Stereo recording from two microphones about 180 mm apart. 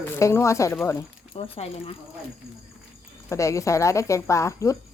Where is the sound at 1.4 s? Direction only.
35° left (ahead or behind).